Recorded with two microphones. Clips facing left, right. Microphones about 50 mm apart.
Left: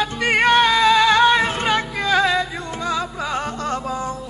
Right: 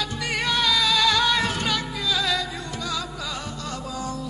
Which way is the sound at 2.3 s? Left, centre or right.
Left.